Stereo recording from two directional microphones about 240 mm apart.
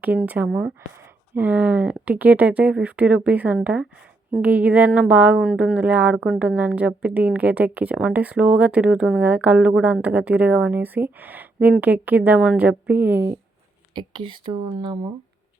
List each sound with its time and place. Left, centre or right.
0.0 s speech: centre
13.9 s speech: centre